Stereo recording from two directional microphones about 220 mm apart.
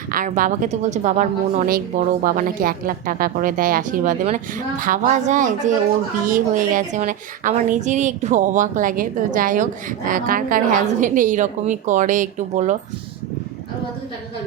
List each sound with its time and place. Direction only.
0.1 s speech: 40° right (ahead or behind)